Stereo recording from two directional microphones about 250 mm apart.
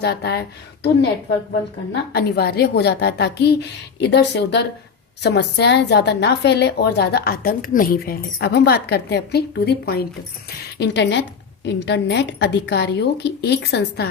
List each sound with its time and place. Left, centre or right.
0.0 s a woman's voice: left
1.9 s a woman's voice: left